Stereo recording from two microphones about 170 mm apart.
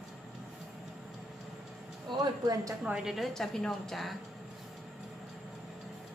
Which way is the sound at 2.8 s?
5° right (ahead or behind).